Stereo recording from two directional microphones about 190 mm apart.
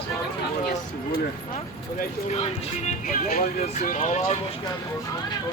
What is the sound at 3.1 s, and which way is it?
Speech, 50° left (ahead or behind).